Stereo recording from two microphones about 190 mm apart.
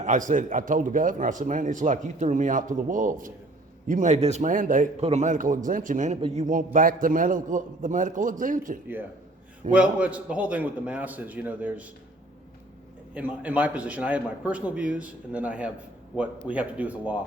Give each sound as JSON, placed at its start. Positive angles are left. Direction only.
{"t": 0.0, "sound": "a man's voice", "side_deg": -40}
{"t": 9.7, "sound": "a man's voice", "side_deg": -5}
{"t": 13.1, "sound": "a man's voice", "side_deg": -10}